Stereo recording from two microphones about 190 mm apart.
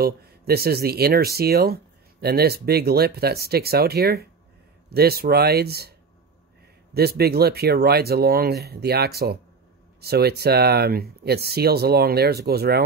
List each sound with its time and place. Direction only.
0.0 s speech: 55° right (ahead or behind)